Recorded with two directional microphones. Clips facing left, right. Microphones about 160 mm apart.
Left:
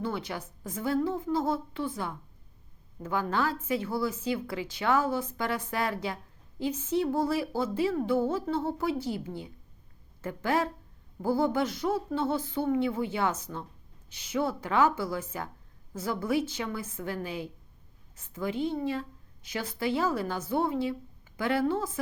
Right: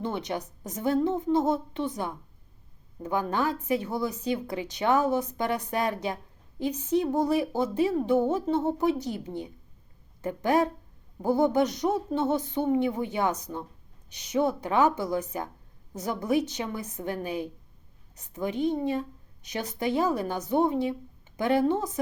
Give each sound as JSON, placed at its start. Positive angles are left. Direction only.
{"t": 0.0, "sound": "a woman's voice", "side_deg": -20}